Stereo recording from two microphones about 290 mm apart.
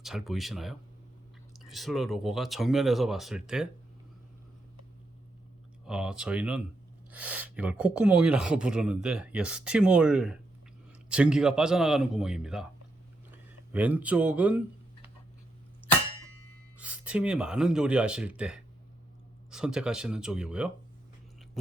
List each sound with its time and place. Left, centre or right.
0.0 s speech: centre
5.8 s speech: centre
13.7 s speech: centre
16.7 s speech: centre